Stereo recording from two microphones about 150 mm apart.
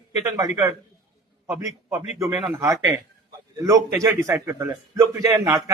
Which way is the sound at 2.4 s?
20° right (ahead or behind).